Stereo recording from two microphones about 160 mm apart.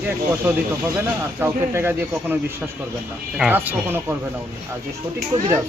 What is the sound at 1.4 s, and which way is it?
Speech, 15° right (ahead or behind).